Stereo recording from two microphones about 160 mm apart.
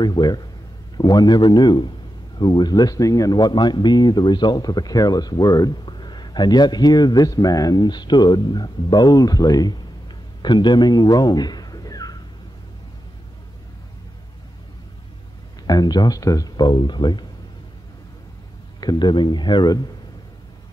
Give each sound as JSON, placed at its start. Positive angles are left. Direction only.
{"t": 0.0, "sound": "speech", "side_deg": 25}
{"t": 15.6, "sound": "speech", "side_deg": 25}
{"t": 18.8, "sound": "speech", "side_deg": 25}